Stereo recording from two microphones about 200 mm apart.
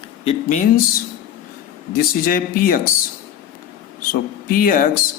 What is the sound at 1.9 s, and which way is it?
Speech, 45° left (ahead or behind).